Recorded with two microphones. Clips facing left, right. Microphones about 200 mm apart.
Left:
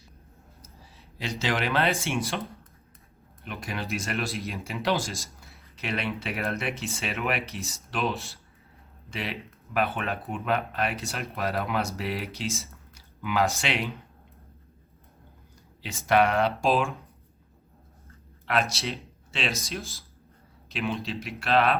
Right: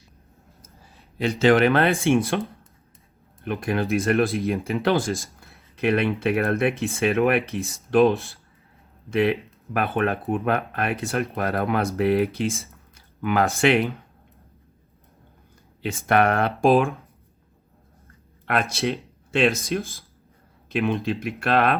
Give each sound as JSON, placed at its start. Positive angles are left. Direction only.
{"t": 0.6, "sound": "speech", "side_deg": -55}
{"t": 3.4, "sound": "speech", "side_deg": -55}
{"t": 15.8, "sound": "speech", "side_deg": -55}
{"t": 18.4, "sound": "speech", "side_deg": -55}